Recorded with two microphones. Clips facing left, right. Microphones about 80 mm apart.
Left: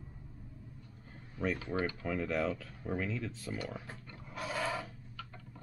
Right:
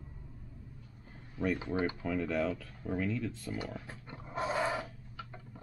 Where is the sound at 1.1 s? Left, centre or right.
Centre.